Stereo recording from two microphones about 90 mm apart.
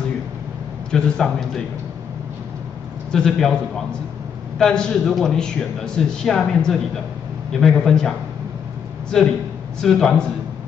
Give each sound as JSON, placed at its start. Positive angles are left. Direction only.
{"t": 0.9, "sound": "a man's voice", "side_deg": 5}
{"t": 3.1, "sound": "a man's voice", "side_deg": 5}
{"t": 9.1, "sound": "a man's voice", "side_deg": 5}